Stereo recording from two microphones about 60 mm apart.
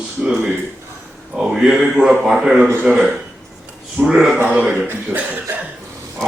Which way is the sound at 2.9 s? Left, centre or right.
Right.